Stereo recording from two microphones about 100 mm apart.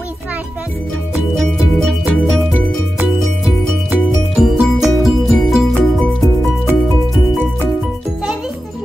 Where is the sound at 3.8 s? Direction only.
5° right (ahead or behind).